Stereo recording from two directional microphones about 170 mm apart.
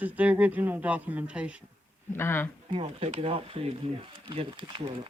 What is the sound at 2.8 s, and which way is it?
Speech, 40° right (ahead or behind).